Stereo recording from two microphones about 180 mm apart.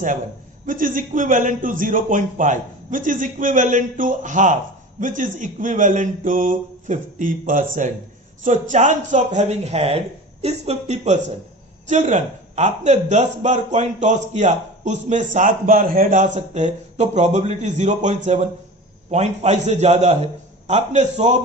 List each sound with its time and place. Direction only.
0.6 s a man's voice: 50° right (ahead or behind)